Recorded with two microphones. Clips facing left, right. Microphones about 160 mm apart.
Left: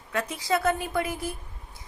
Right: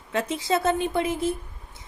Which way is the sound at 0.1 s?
25° right (ahead or behind).